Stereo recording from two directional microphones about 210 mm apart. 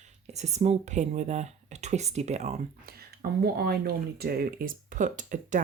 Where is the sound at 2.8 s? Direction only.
45° right (ahead or behind).